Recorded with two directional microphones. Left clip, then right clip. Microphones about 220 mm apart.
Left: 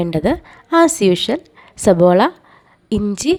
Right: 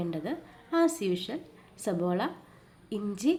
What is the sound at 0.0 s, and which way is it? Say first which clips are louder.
A woman's voice: left 17 dB; 50° left (ahead or behind).